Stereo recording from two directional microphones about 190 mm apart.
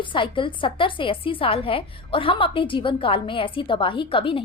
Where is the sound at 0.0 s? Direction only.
25° left (ahead or behind).